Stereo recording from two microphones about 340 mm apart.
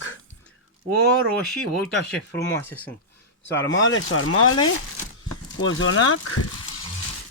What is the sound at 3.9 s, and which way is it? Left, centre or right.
Speech, left.